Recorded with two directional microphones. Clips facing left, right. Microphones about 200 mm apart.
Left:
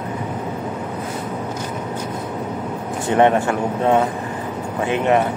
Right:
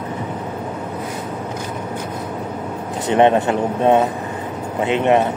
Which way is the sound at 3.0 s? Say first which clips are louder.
Right 1 dB; 20° right (ahead or behind).